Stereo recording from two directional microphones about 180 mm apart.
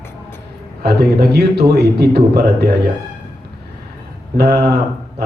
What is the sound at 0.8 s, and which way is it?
A man's voice, 60° right (ahead or behind).